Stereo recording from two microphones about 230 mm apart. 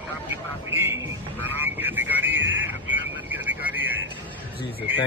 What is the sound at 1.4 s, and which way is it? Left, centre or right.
Vehicle, centre.